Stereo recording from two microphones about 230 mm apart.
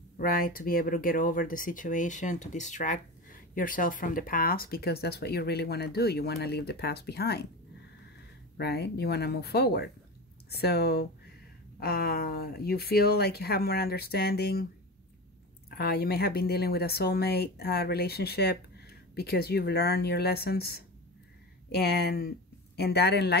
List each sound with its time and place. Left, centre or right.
0.2 s speech: left
8.5 s speech: left
15.7 s speech: left